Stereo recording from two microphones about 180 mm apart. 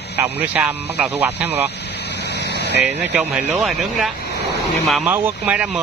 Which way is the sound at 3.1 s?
5° right (ahead or behind).